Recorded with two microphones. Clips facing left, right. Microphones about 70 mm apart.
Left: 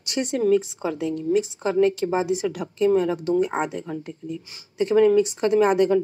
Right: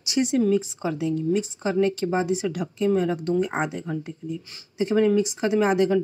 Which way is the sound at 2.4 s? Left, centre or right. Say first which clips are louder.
Left 2 dB; left.